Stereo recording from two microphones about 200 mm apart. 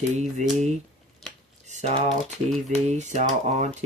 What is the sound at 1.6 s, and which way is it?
Speech, 35° right (ahead or behind).